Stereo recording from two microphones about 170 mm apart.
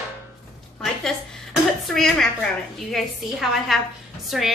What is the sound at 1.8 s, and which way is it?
A woman's voice, centre (ahead or behind).